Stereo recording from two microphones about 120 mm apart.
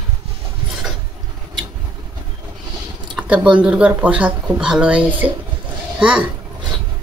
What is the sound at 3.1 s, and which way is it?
Speech, 10° right (ahead or behind).